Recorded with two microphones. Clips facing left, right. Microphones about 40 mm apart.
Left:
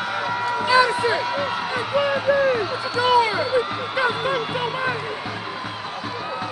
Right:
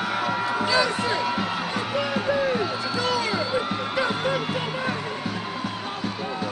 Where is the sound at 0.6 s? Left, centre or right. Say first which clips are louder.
Left 7 dB; centre.